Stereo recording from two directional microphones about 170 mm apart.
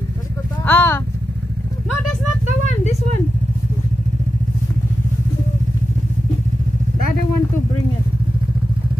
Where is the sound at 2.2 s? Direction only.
40° left (ahead or behind).